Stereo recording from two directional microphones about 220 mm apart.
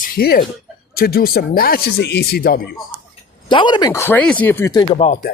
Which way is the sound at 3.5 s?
20° left (ahead or behind).